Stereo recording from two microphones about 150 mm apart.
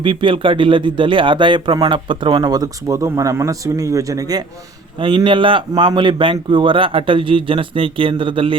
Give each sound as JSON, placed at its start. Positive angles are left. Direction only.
{"t": 0.0, "sound": "speech", "side_deg": -35}
{"t": 4.9, "sound": "speech", "side_deg": -35}